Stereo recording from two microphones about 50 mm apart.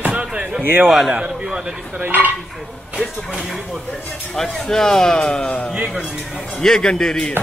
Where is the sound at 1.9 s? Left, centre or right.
Right.